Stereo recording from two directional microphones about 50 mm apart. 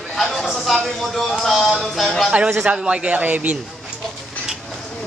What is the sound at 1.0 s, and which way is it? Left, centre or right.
Speech, centre.